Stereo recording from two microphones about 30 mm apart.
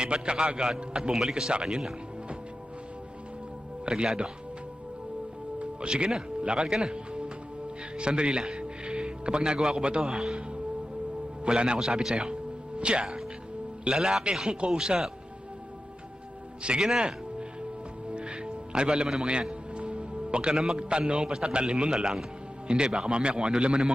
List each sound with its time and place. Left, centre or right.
0.0 s a man's voice: right
1.5 s a man's voice: right
3.8 s a man's voice: right
5.5 s music: right
6.4 s a man's voice: right
10.1 s music: right
11.4 s a man's voice: right
13.9 s a man's voice: centre
16.7 s a man's voice: right
18.1 s music: right
20.5 s a man's voice: right
20.7 s a man's voice: right